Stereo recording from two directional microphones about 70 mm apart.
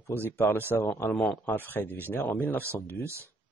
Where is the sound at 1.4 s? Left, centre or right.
Left.